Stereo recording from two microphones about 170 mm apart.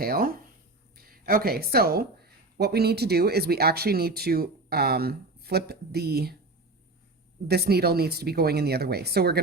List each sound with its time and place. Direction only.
0.0 s speech: 60° right (ahead or behind)
7.4 s speech: 70° right (ahead or behind)